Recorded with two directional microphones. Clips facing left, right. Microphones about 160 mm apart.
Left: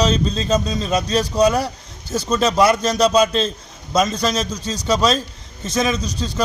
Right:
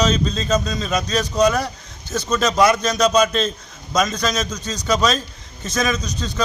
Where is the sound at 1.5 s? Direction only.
35° left (ahead or behind).